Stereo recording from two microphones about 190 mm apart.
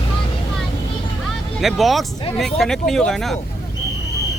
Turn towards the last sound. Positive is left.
turn(degrees=0)  # may be behind; listen again after turning